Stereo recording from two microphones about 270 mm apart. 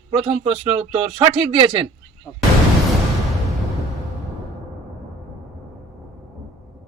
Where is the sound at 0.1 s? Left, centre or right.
Right.